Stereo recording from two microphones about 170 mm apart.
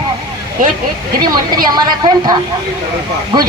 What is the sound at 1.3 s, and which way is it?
A woman's voice, 25° right (ahead or behind).